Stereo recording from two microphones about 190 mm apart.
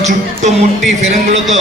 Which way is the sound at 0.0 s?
35° right (ahead or behind).